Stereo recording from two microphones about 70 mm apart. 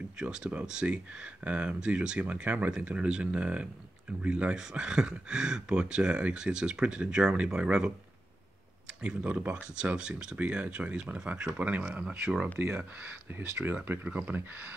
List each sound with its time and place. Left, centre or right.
0.2 s speech: centre
9.0 s speech: centre
12.5 s speech: right